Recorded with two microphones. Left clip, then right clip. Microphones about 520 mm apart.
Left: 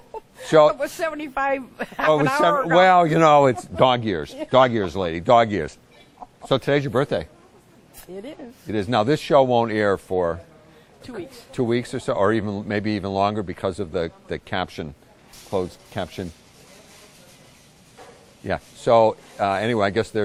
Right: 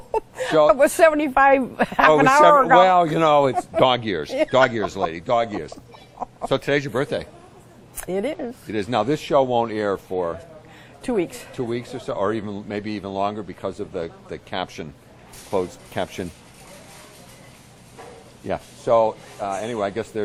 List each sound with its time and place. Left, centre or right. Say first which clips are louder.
0.1 s a sound: right 11 dB; right
0.7 s a man's voice: right 10 dB; right
2.7 s speech: even; left
6.5 s speech: left 2 dB; left
8.0 s a man's voice: right 11 dB; right
8.6 s speech: left 2 dB; left
11.5 s speech: left 7 dB; left
18.9 s speech: left 2 dB; left
19.4 s speech: left 4 dB; left